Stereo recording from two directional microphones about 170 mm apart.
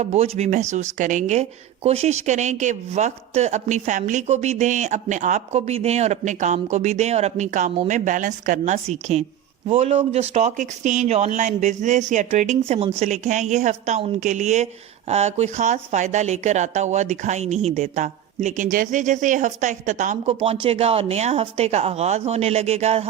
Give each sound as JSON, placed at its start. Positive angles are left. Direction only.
{"t": 0.0, "sound": "a woman's voice", "side_deg": -40}